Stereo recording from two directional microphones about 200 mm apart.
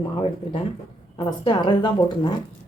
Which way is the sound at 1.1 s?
25° left (ahead or behind).